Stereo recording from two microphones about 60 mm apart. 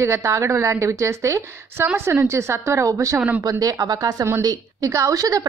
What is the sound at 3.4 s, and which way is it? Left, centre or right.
Speech, right.